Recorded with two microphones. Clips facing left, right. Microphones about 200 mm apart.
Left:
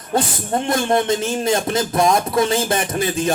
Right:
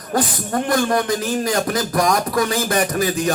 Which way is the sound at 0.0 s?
25° left (ahead or behind).